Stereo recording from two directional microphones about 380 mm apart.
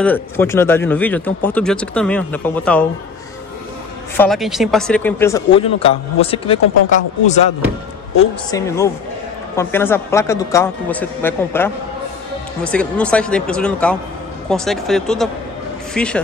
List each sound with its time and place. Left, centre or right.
0.0 s speech: centre
4.2 s a man's voice: centre
8.5 s a man's voice: centre